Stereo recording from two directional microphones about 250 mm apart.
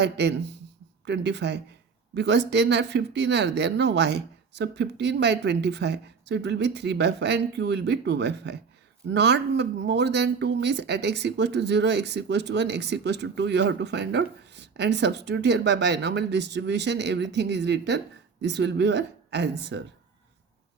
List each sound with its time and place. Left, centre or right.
0.0 s speech: right